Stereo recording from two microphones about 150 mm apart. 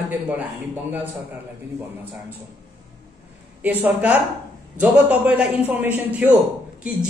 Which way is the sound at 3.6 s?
10° right (ahead or behind).